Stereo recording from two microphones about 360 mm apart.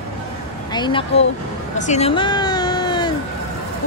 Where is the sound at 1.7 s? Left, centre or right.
Centre.